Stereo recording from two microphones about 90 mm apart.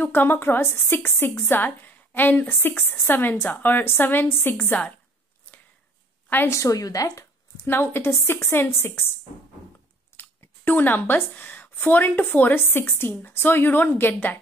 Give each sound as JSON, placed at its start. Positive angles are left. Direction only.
{"t": 0.0, "sound": "a woman's voice", "side_deg": 25}
{"t": 5.5, "sound": "a sound", "side_deg": 20}
{"t": 6.2, "sound": "a woman's voice", "side_deg": 25}
{"t": 6.6, "sound": "speech", "side_deg": 40}
{"t": 7.6, "sound": "a woman's voice", "side_deg": 25}
{"t": 10.1, "sound": "speech", "side_deg": 20}